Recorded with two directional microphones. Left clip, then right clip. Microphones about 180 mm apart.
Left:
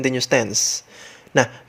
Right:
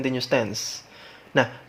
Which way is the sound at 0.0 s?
30° left (ahead or behind).